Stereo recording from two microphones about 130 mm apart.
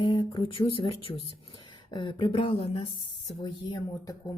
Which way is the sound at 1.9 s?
35° left (ahead or behind).